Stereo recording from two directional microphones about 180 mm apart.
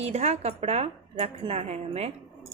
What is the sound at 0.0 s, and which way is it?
A woman's voice, 35° right (ahead or behind).